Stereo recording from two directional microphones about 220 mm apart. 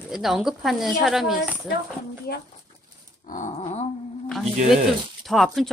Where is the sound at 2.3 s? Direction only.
45° left (ahead or behind).